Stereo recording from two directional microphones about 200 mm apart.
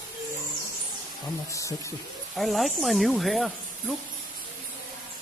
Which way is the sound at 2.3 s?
Centre (ahead or behind).